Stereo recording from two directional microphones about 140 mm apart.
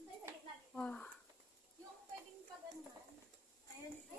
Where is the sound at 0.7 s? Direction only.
10° left (ahead or behind).